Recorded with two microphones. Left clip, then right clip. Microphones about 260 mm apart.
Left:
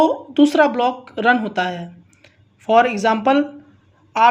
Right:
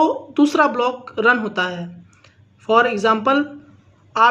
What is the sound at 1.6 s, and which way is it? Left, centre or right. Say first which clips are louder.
Speech: even; left.